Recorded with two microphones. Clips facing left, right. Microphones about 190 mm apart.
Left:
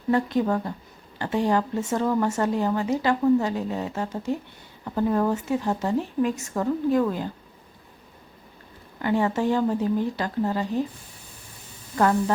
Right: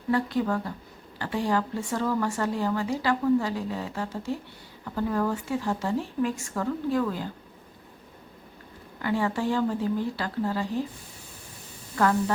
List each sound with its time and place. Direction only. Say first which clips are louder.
0.1 s speech: left 3 dB; 20° left (ahead or behind)
9.0 s speech: left 4 dB; 25° left (ahead or behind)